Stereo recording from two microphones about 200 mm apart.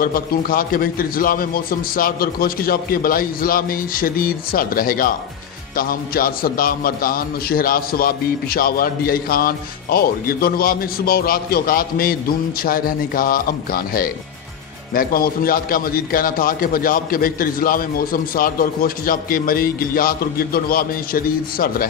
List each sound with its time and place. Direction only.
0.0 s a man's voice: 45° left (ahead or behind)